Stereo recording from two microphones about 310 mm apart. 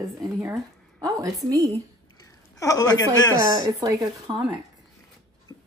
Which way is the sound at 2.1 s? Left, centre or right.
Centre.